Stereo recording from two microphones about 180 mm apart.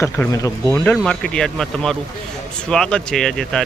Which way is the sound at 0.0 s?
15° left (ahead or behind).